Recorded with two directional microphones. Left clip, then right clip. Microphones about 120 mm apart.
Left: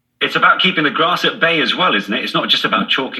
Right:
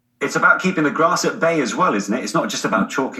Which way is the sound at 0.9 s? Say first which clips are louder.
Left 2 dB; 30° right (ahead or behind).